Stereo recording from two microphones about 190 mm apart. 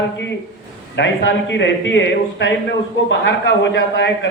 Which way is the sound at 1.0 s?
70° left (ahead or behind).